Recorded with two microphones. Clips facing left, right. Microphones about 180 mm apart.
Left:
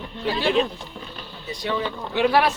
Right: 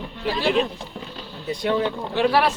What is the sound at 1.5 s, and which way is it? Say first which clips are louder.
Speech: right 4 dB; 55° right (ahead or behind).